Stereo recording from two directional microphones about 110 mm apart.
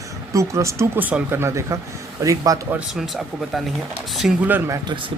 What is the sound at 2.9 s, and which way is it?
Speech, centre (ahead or behind).